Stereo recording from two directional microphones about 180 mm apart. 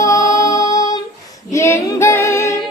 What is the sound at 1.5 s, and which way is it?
Female singing, 15° left (ahead or behind).